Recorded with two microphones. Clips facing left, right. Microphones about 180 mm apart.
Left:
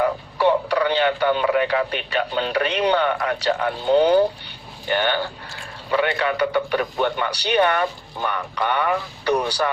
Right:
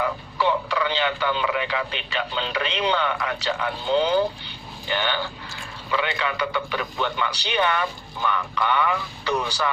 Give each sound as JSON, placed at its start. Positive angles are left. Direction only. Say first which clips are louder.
{"t": 0.0, "sound": "speech", "louder": "left 5 dB", "side_deg": 45}